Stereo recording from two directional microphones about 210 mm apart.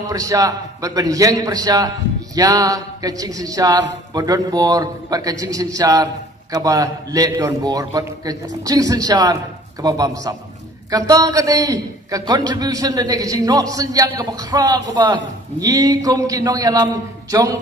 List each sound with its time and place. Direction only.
0.0 s a man's voice: 15° right (ahead or behind)